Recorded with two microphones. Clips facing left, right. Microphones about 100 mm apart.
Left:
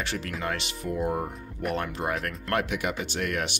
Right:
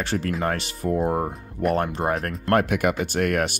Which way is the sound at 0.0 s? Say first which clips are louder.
Right 7 dB; 40° right (ahead or behind).